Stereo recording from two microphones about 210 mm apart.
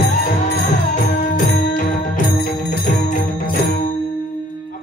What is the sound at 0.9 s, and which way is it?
Music, 40° left (ahead or behind).